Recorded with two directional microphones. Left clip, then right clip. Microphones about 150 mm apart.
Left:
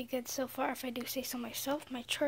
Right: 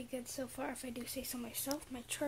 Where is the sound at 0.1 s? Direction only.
30° left (ahead or behind).